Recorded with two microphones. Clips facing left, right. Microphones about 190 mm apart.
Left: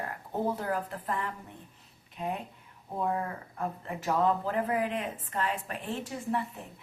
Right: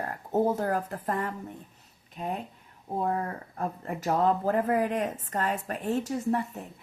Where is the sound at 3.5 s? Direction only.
40° right (ahead or behind).